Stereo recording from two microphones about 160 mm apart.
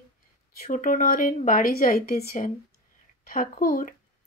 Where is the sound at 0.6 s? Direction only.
55° left (ahead or behind).